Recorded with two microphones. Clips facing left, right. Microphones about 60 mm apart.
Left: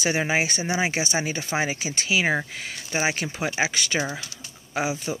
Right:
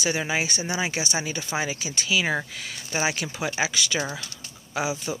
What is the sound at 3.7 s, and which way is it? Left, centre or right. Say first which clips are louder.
Speech: left 1 dB; left.